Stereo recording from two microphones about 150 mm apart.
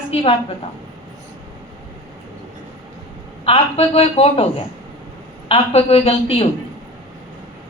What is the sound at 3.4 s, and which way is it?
A woman's voice, 40° left (ahead or behind).